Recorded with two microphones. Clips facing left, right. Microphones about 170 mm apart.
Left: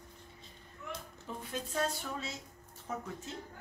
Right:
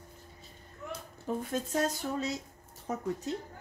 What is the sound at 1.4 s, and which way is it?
Speech, 45° right (ahead or behind).